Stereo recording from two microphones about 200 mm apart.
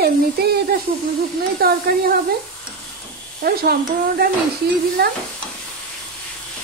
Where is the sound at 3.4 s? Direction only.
50° right (ahead or behind).